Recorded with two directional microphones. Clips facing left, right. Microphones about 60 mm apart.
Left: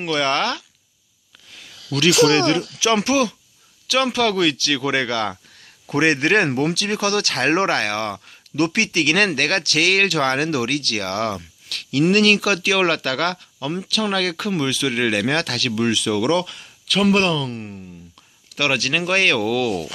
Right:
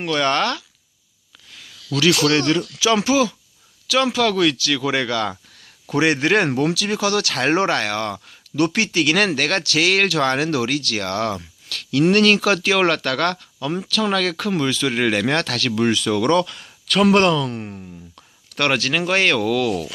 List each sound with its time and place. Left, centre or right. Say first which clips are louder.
0.0 s speech: right 1 dB; centre
1.9 s speech: left 2 dB; left; by 15.4 s centre
15.4 s speech: right 1 dB; centre
16.1 s speech: right 2 dB; centre
17.0 s speech: right 3 dB; centre
17.4 s speech: right 2 dB; centre
18.5 s speech: right 1 dB; centre
19.4 s speech: right 1 dB; centre